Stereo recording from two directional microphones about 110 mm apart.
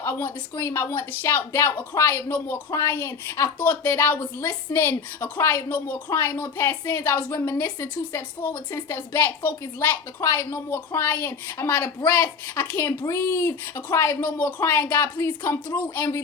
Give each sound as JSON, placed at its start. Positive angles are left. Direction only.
{"t": 0.0, "sound": "a woman's voice", "side_deg": 20}